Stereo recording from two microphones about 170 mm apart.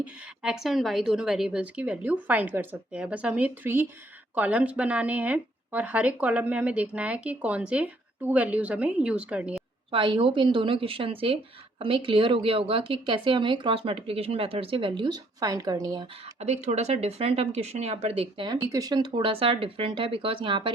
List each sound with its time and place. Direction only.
0.0 s speech: 5° right (ahead or behind)
9.9 s a woman's voice: 30° right (ahead or behind)
16.4 s a woman's voice: 40° right (ahead or behind)